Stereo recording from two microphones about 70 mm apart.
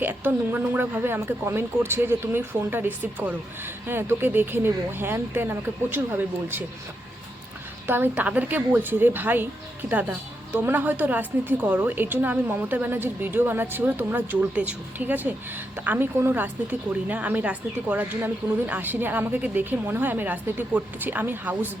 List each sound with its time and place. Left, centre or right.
0.0 s a woman's voice: right
7.9 s a woman's voice: right